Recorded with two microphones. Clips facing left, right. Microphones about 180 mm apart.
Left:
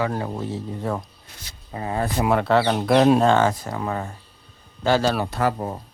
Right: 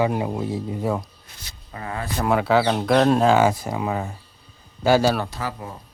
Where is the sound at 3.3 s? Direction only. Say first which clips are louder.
Right 1 dB; 10° right (ahead or behind).